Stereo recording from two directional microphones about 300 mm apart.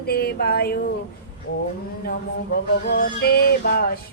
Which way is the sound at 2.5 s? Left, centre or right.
Left.